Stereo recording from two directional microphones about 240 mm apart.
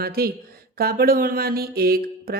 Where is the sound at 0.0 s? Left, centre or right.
Right.